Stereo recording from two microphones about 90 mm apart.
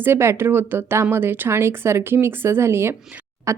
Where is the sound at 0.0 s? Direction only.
25° right (ahead or behind).